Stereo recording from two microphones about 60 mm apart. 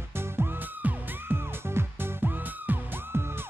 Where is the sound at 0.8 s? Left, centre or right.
Right.